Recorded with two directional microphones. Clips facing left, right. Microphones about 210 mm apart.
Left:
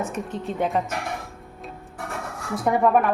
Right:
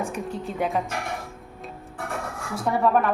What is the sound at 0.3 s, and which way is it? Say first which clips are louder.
Speech: left 1 dB; centre (ahead or behind).